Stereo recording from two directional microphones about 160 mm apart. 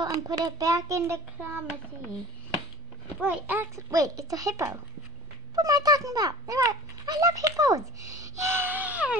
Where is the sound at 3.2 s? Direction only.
10° right (ahead or behind).